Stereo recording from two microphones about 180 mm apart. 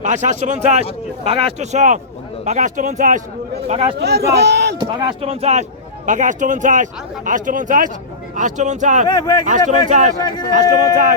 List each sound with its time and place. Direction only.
0.0 s speech: 45° right (ahead or behind)
3.7 s speech: 35° right (ahead or behind)
3.9 s speech: 65° right (ahead or behind)
4.8 s speech: 25° right (ahead or behind); by 9.0 s 45° right (ahead or behind)
9.1 s speech: 20° left (ahead or behind)
9.5 s speech: 40° right (ahead or behind)
10.2 s speech: 25° left (ahead or behind)